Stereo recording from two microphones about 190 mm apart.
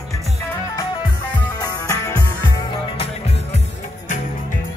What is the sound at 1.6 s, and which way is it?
Music, 20° left (ahead or behind).